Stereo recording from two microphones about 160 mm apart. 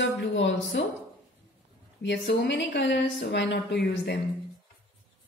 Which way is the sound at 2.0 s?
90° left.